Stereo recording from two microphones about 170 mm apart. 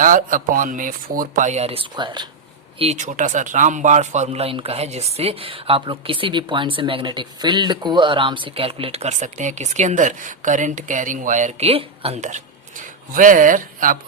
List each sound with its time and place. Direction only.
0.0 s speech: 50° right (ahead or behind); by 2.2 s 25° right (ahead or behind)
2.7 s a man's voice: 40° right (ahead or behind)